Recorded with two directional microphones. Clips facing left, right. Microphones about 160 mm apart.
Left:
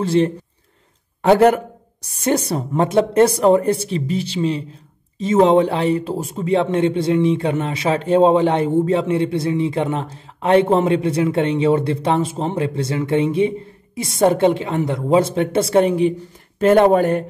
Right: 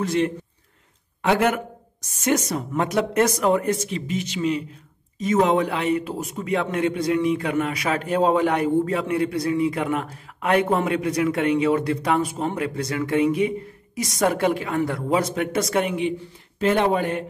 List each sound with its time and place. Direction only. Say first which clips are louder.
0.0 s speech: left 5 dB; 30° left (ahead or behind)